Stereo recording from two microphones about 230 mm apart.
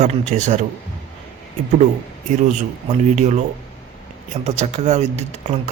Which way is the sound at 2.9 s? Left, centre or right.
Right.